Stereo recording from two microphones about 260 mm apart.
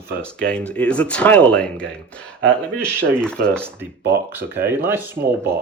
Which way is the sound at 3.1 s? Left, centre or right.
Centre.